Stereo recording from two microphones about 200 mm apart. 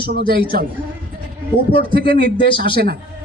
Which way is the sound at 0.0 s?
50° right (ahead or behind).